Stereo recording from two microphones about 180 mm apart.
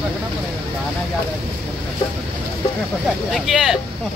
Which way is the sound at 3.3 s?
Centre (ahead or behind).